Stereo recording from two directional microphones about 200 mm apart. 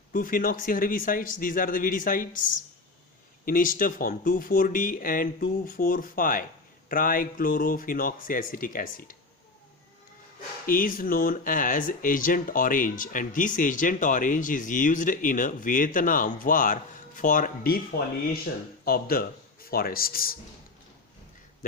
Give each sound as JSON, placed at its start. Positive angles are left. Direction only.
{"t": 0.1, "sound": "speech", "side_deg": 45}
{"t": 3.4, "sound": "speech", "side_deg": 45}
{"t": 10.7, "sound": "speech", "side_deg": 45}